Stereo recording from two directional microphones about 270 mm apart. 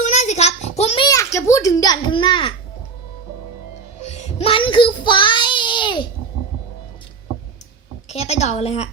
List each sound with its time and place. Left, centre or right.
0.0 s a sound: left
4.0 s child singing: left
8.1 s a woman's voice: left